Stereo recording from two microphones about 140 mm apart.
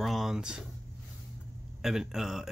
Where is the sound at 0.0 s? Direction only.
Centre (ahead or behind).